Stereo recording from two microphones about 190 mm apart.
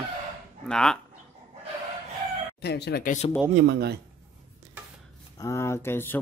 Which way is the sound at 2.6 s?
60° left (ahead or behind).